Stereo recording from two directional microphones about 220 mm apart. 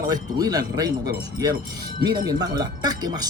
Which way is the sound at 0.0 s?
15° right (ahead or behind).